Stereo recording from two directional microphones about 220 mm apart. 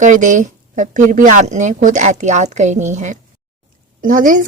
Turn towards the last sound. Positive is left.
turn(degrees=-35)  # may be behind; listen again after turning